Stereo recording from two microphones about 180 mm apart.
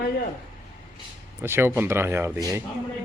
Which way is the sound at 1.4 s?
10° right (ahead or behind).